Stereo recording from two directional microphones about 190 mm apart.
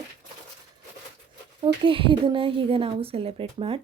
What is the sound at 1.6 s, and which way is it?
A woman's voice, 25° right (ahead or behind).